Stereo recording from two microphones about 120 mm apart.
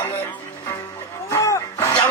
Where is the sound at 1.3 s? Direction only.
25° left (ahead or behind).